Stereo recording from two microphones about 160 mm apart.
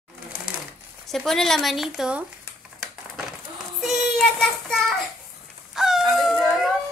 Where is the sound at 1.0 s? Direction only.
Centre (ahead or behind).